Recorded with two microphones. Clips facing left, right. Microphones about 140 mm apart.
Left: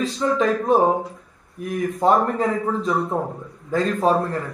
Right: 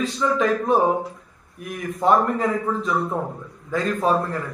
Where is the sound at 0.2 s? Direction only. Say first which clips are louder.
Left 1 dB; 30° left (ahead or behind).